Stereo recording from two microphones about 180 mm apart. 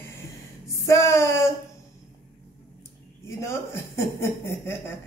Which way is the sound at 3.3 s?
15° left (ahead or behind).